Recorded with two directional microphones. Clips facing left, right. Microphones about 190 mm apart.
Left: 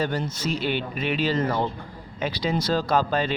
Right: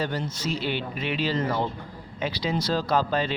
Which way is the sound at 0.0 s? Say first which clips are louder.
Left 2 dB; 45° left (ahead or behind).